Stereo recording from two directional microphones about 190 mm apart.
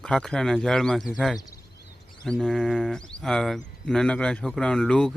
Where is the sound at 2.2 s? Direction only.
5° left (ahead or behind).